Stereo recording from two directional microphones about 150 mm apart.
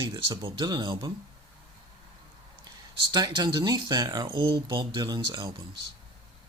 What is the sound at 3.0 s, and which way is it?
Speech, 30° right (ahead or behind).